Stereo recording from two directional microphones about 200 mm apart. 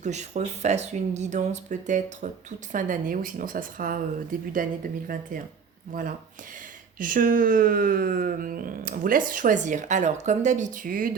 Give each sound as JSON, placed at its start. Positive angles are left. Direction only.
{"t": 0.0, "sound": "speech", "side_deg": -35}